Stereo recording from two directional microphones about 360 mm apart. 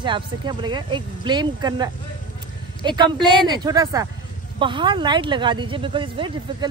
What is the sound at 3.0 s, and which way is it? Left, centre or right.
Speech, centre.